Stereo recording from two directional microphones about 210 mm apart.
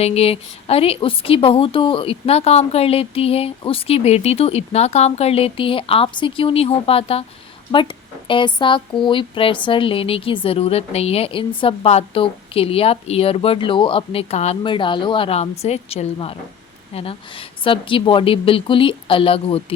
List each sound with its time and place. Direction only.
0.0 s speech: 30° left (ahead or behind)